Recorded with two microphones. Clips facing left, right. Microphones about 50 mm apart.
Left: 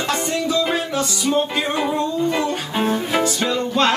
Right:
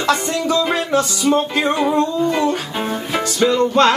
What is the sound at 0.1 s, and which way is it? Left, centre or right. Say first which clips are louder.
Music: right 4 dB; right.